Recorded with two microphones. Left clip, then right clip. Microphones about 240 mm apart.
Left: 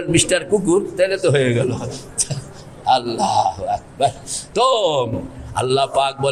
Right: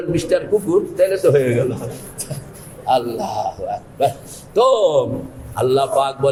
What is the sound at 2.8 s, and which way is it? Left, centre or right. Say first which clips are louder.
A man's voice: left 1 dB; left.